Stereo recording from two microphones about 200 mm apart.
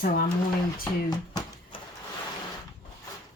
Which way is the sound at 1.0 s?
20° left (ahead or behind).